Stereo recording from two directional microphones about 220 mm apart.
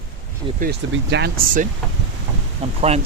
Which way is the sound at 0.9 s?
50° right (ahead or behind).